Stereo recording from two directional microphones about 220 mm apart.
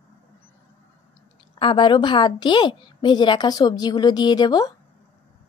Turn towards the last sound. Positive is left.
turn(degrees=20)  # may be behind; listen again after turning